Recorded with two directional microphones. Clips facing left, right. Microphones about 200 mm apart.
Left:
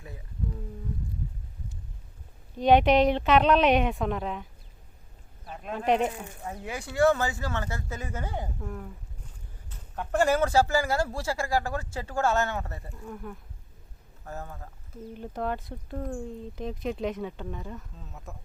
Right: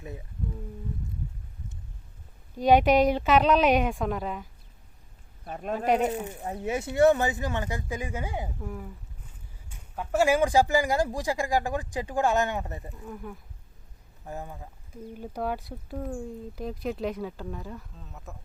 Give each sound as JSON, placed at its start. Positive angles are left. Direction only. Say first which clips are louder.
{"t": 2.6, "sound": "speech", "louder": "even", "side_deg": 0}
{"t": 5.5, "sound": "speech", "louder": "right 5 dB", "side_deg": -45}
{"t": 5.7, "sound": "speech", "louder": "right 1 dB", "side_deg": -5}
{"t": 6.2, "sound": "speech", "louder": "right 5 dB", "side_deg": -20}
{"t": 12.9, "sound": "speech", "louder": "even", "side_deg": 0}
{"t": 14.3, "sound": "speech", "louder": "right 1 dB", "side_deg": -15}